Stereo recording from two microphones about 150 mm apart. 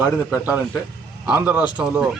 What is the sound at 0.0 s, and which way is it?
A man's voice, 10° right (ahead or behind).